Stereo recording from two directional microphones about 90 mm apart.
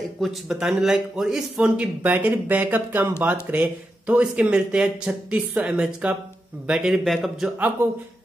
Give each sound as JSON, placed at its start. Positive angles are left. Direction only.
{"t": 0.2, "sound": "speech", "side_deg": -5}
{"t": 2.0, "sound": "speech", "side_deg": -20}